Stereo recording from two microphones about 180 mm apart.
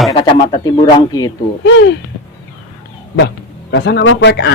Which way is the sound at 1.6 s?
85° left.